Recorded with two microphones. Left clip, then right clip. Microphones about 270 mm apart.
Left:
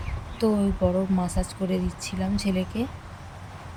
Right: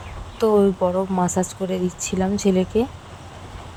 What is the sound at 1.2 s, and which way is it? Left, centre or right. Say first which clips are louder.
Speech: right 7 dB; centre.